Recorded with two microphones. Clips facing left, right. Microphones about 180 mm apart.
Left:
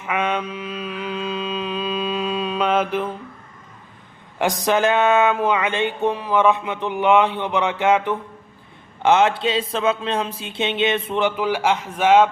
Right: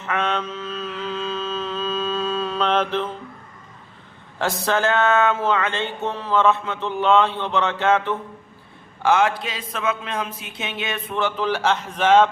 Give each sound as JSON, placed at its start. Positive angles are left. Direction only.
{"t": 0.0, "sound": "mantra", "side_deg": 10}
{"t": 4.4, "sound": "a sound", "side_deg": 15}
{"t": 9.0, "sound": "speech", "side_deg": 25}